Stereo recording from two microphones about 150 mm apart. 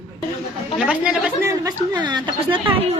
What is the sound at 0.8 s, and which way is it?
Speech, 5° right (ahead or behind).